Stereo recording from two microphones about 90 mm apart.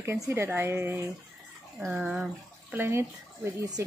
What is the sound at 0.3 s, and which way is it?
Speech, 25° right (ahead or behind).